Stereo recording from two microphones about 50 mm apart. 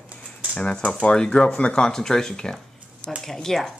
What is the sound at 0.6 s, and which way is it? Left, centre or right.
Speech, left.